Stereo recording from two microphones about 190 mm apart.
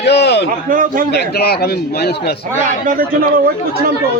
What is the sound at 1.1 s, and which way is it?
A man's voice, 55° left (ahead or behind).